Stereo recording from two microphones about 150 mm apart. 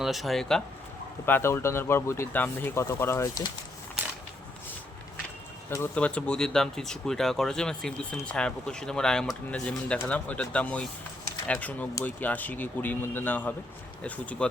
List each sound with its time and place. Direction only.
0.0 s speech: centre (ahead or behind)
1.2 s speech: 15° left (ahead or behind)
5.7 s speech: 10° left (ahead or behind)